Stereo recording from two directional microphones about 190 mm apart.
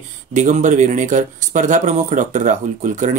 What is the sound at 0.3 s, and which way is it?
Speech, 40° right (ahead or behind).